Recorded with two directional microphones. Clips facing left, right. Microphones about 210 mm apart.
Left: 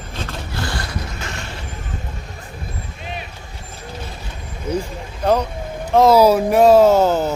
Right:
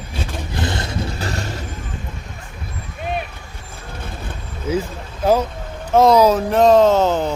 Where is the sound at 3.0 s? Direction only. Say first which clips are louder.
Right 8 dB; 55° right (ahead or behind).